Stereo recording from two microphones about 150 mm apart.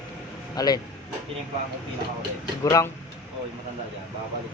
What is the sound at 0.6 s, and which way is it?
Speech, 25° left (ahead or behind).